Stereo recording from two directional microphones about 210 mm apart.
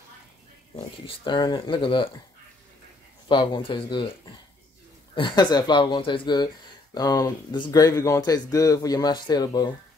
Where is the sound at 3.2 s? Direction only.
25° left (ahead or behind).